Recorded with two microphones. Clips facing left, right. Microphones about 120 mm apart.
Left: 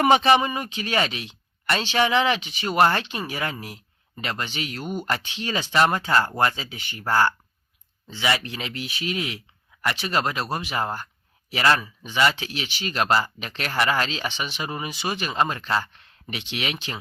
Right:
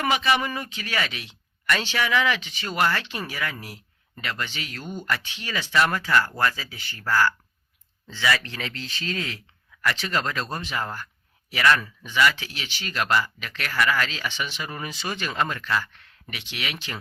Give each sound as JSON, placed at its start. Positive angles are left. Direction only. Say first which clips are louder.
{"t": 0.0, "sound": "speech", "louder": "left 6 dB", "side_deg": 35}
{"t": 2.7, "sound": "speech", "louder": "left 5 dB", "side_deg": 30}
{"t": 3.0, "sound": "speech", "louder": "left 2 dB", "side_deg": 20}
{"t": 5.0, "sound": "speech", "louder": "left 2 dB", "side_deg": 30}